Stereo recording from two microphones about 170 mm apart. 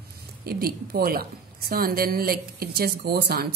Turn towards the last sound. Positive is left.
turn(degrees=-70)  # may be behind; listen again after turning